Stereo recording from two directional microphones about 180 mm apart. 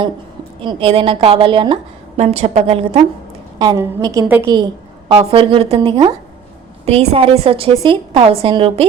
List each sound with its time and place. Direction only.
0.6 s a woman's voice: 30° right (ahead or behind)
3.6 s a woman's voice: 20° right (ahead or behind)
4.5 s a woman's voice: 25° right (ahead or behind)